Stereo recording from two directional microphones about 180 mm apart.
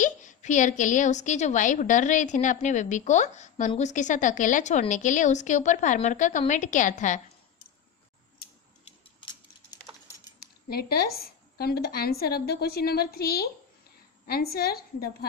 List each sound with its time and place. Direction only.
0.0 s a woman's voice: 45° left (ahead or behind)
10.7 s a woman's voice: 60° left (ahead or behind)